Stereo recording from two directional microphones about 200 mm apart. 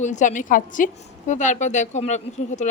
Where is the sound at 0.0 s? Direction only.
35° left (ahead or behind).